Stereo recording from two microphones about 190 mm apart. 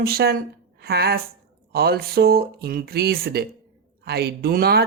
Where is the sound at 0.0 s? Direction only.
50° right (ahead or behind).